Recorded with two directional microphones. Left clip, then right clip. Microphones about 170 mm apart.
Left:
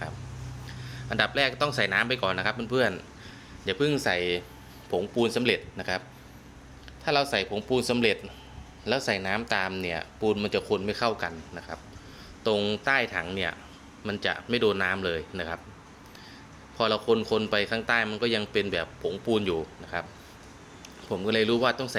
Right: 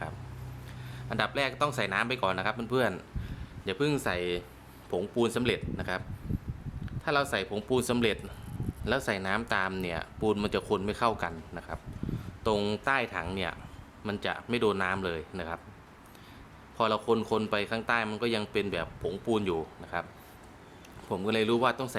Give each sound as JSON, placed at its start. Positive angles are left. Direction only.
{"t": 1.1, "sound": "a man's voice", "side_deg": -5}
{"t": 7.0, "sound": "a man's voice", "side_deg": -10}
{"t": 16.7, "sound": "a man's voice", "side_deg": -10}
{"t": 21.1, "sound": "a man's voice", "side_deg": -10}